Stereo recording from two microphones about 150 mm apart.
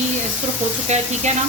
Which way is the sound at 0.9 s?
50° right (ahead or behind).